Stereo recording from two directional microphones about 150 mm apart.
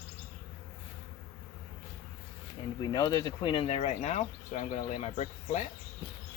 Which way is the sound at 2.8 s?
25° left (ahead or behind).